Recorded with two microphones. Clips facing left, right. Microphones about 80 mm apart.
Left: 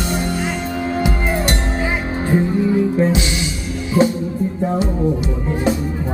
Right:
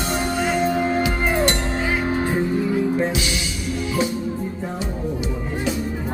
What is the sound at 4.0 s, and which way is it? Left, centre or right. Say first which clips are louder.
Music: left 9 dB; left.